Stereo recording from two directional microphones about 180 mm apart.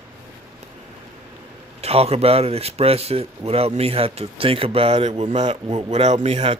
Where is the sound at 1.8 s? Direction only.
35° right (ahead or behind).